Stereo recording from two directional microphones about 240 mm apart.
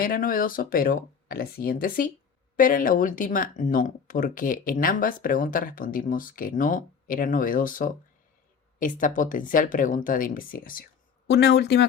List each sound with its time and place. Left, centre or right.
0.0 s speech: left